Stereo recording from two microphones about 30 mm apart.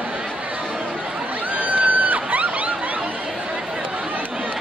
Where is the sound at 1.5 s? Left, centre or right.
Right.